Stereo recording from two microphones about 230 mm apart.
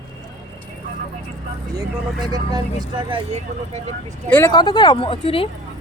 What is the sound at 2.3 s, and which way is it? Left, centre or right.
Speech, centre.